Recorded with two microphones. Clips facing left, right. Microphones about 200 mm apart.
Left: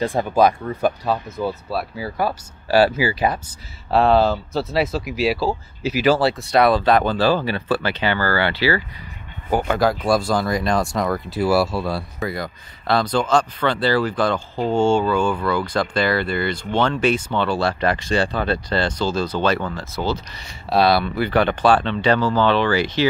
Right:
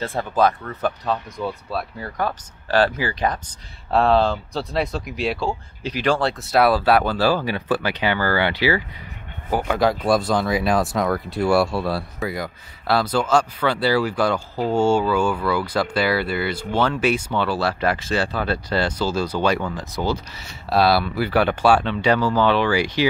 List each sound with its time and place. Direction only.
0.0 s speech: 15° left (ahead or behind); by 8.8 s 15° right (ahead or behind)
9.5 s speech: centre (ahead or behind)
20.7 s speech: centre (ahead or behind)